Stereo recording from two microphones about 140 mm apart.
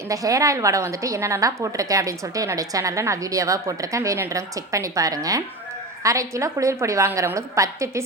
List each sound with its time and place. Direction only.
0.1 s a woman's voice: 25° right (ahead or behind)